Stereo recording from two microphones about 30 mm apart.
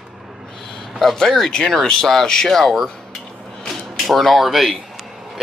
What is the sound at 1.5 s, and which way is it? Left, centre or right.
Speech, left.